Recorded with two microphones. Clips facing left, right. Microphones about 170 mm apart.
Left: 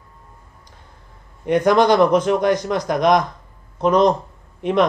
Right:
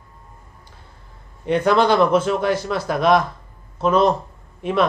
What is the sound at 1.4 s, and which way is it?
A man's voice, 15° left (ahead or behind).